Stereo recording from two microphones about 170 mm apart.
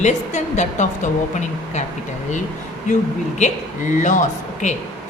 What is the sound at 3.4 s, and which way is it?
Speech, 40° left (ahead or behind).